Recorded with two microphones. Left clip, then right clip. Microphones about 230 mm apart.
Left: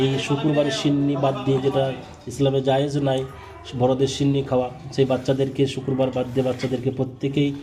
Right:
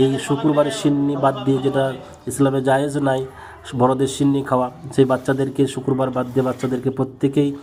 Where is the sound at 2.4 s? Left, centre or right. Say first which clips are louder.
Right 3 dB; right.